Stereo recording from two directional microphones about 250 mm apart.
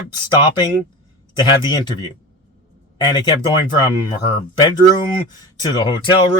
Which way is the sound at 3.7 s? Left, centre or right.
Centre.